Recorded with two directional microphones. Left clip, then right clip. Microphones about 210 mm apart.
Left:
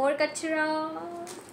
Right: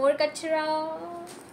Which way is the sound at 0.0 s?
Centre (ahead or behind).